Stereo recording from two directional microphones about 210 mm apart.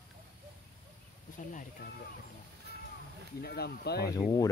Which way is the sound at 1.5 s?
40° left (ahead or behind).